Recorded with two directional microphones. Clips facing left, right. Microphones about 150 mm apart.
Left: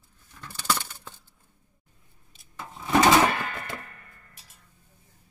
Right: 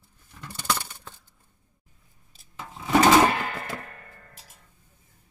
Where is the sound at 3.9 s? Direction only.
65° right (ahead or behind).